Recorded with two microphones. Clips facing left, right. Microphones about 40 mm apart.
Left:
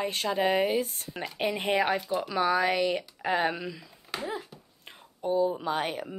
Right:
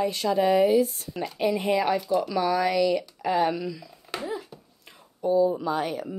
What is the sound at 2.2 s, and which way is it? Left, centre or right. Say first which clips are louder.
A woman's voice: right 2 dB; left.